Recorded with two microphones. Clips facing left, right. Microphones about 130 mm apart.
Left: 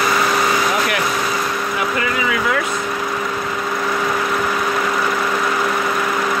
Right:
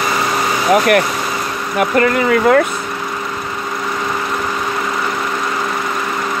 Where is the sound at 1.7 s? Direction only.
55° right (ahead or behind).